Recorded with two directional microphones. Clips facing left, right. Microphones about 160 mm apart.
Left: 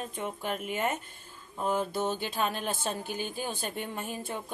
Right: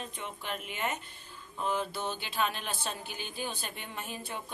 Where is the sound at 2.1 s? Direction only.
45° left (ahead or behind).